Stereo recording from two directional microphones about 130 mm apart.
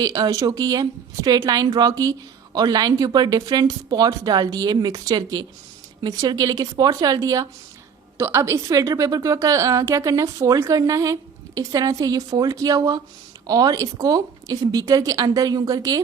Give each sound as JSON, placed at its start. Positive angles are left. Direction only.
{"t": 0.0, "sound": "a woman's voice", "side_deg": -30}